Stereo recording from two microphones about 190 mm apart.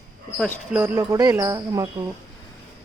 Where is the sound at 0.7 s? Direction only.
10° right (ahead or behind).